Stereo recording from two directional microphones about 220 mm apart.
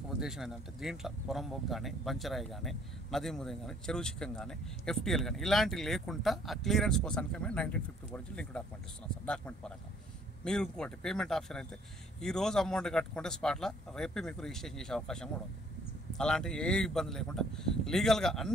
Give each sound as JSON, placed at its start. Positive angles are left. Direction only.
{"t": 0.2, "sound": "speech", "side_deg": 0}